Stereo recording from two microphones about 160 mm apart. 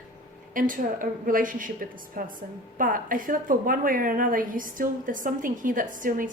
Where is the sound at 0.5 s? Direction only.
60° right (ahead or behind).